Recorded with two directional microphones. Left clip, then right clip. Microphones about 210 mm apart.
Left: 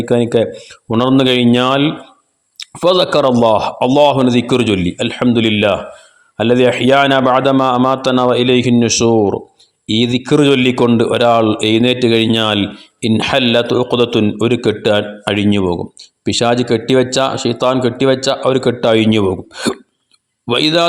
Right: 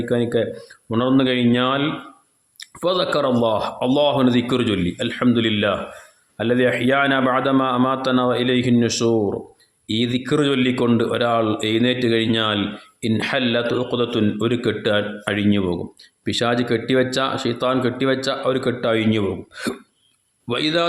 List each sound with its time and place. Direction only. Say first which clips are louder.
0.0 s a man's voice: left 7 dB; 30° left (ahead or behind)